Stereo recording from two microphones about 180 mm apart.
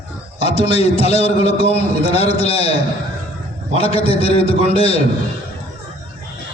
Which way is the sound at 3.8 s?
30° left (ahead or behind).